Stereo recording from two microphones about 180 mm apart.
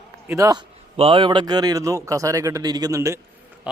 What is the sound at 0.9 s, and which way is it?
A man's voice, 30° right (ahead or behind).